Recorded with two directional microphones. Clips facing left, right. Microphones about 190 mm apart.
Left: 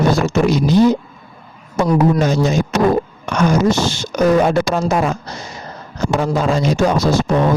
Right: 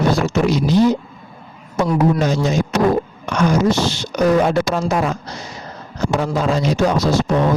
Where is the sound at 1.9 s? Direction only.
45° left (ahead or behind).